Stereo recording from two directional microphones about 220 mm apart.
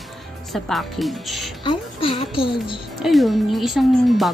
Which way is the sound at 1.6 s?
25° left (ahead or behind).